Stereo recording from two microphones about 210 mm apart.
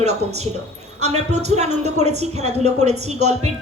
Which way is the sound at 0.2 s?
30° right (ahead or behind).